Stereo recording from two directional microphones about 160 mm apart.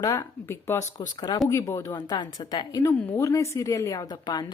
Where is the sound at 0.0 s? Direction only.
20° left (ahead or behind).